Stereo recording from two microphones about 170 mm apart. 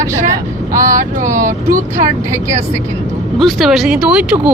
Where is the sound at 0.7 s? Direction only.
50° right (ahead or behind).